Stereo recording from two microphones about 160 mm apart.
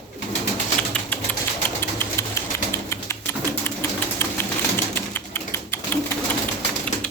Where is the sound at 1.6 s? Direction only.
10° left (ahead or behind).